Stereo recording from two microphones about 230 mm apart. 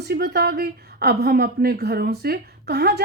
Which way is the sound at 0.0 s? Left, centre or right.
Right.